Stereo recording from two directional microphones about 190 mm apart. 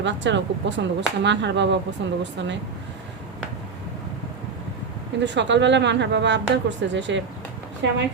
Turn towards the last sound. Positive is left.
turn(degrees=-70)  # may be behind; listen again after turning